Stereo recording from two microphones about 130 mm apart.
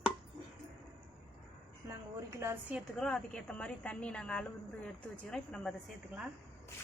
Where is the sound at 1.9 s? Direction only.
20° right (ahead or behind).